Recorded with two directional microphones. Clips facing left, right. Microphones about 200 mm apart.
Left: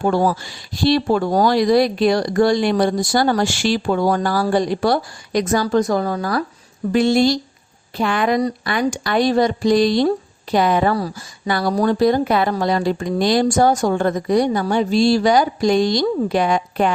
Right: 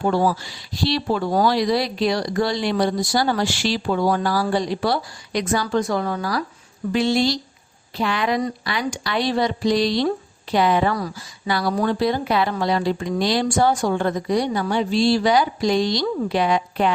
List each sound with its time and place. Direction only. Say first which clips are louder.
0.0 s speech: left 2 dB; 50° left (ahead or behind)
6.9 s speech: left 5 dB; 50° left (ahead or behind)